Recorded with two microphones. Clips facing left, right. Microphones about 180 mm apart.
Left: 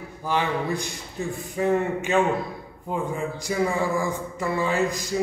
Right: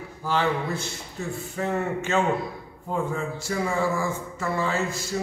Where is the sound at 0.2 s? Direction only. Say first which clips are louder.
Even; 15° left (ahead or behind).